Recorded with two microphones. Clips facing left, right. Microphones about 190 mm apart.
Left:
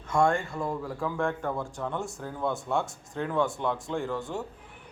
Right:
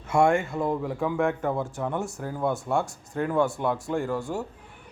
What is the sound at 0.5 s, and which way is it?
Speech, 20° right (ahead or behind).